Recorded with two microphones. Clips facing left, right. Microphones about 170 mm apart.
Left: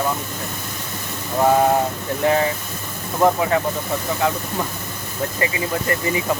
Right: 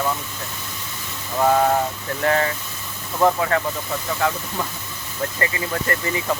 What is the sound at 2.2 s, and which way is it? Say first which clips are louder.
Speech: left 2 dB; 15° left (ahead or behind).